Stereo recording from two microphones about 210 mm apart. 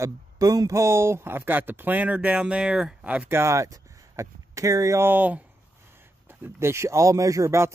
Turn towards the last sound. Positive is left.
turn(degrees=-15)  # may be behind; listen again after turning